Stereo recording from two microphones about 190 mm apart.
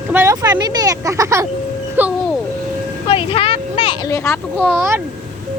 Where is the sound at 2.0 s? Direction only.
10° right (ahead or behind).